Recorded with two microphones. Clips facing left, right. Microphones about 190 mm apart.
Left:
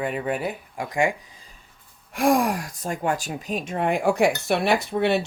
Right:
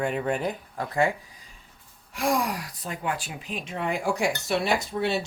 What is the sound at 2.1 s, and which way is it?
Speech, 50° left (ahead or behind).